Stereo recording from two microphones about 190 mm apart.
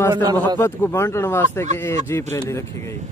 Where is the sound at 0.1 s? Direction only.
20° right (ahead or behind).